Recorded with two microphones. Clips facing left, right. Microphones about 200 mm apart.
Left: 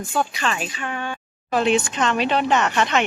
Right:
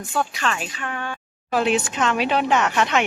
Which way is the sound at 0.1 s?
Centre (ahead or behind).